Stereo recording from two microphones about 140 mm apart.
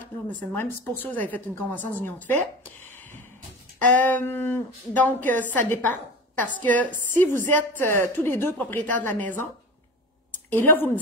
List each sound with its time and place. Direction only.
0.0 s a woman's voice: 10° left (ahead or behind)
10.5 s a woman's voice: 15° left (ahead or behind)